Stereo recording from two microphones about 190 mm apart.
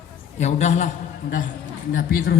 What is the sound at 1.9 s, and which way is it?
Speech, 50° left (ahead or behind).